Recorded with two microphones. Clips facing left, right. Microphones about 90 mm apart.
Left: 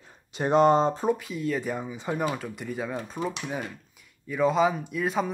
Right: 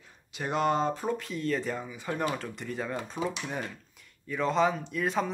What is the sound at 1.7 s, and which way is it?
Speech, 20° left (ahead or behind).